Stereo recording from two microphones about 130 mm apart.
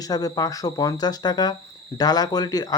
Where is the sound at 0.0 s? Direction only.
30° left (ahead or behind).